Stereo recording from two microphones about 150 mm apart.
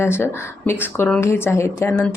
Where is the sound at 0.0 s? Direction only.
15° left (ahead or behind).